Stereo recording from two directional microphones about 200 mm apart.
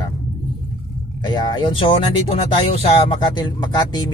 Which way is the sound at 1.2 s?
20° left (ahead or behind).